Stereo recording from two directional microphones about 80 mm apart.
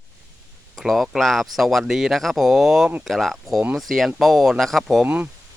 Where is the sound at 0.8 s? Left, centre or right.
Centre.